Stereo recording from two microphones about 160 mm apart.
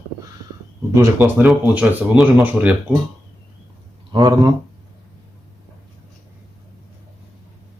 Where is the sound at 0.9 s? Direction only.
15° right (ahead or behind).